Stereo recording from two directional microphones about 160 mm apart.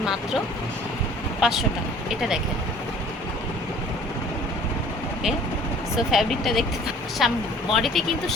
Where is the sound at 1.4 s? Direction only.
Centre (ahead or behind).